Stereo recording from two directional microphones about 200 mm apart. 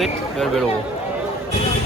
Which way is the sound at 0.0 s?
Centre (ahead or behind).